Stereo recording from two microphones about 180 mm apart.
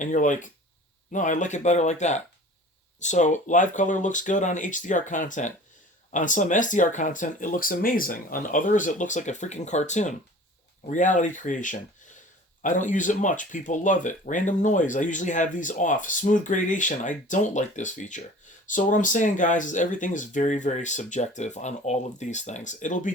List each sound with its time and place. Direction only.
0.0 s speech: 45° left (ahead or behind)